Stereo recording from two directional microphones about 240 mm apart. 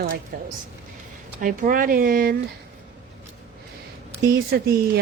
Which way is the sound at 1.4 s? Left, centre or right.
Right.